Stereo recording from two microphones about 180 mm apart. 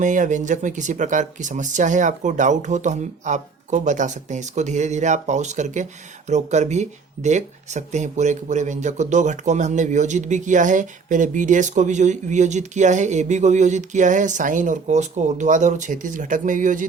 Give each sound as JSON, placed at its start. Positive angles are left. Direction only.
{"t": 0.0, "sound": "speech", "side_deg": -45}